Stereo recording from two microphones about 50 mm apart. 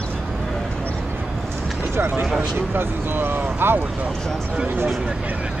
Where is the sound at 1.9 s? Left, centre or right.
Right.